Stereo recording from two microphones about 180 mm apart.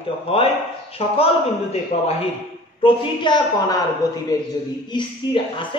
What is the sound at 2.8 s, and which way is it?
A woman's voice, 25° left (ahead or behind).